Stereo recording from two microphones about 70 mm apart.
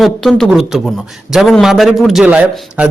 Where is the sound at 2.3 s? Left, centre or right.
Centre.